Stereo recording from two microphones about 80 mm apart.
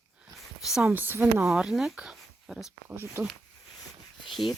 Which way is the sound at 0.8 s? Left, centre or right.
Right.